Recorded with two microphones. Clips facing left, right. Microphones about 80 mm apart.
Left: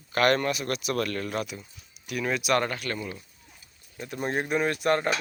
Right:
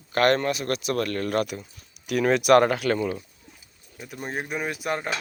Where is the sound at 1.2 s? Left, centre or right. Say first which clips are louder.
Right 6 dB; right.